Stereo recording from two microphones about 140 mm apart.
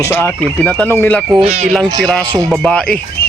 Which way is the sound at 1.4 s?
50° right (ahead or behind).